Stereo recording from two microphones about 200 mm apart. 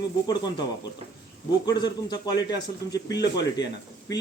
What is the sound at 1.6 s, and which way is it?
A man's voice, 20° left (ahead or behind).